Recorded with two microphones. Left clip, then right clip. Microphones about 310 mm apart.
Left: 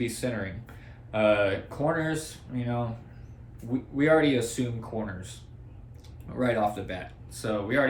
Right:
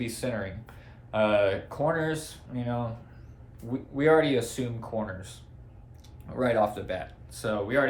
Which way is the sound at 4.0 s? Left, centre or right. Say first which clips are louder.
Even; centre.